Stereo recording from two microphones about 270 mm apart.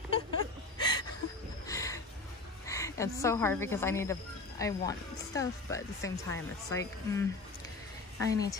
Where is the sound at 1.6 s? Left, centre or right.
Centre.